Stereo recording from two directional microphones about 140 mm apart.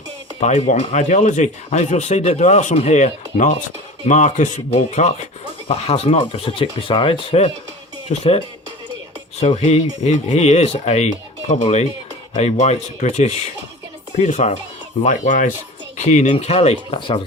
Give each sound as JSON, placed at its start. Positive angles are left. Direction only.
{"t": 0.3, "sound": "speech", "side_deg": 55}
{"t": 15.0, "sound": "speech", "side_deg": 65}
{"t": 16.0, "sound": "speech", "side_deg": 55}